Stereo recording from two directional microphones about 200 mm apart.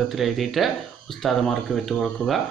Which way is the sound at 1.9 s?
Centre (ahead or behind).